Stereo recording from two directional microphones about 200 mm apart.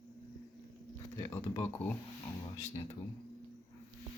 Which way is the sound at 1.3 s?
15° left (ahead or behind).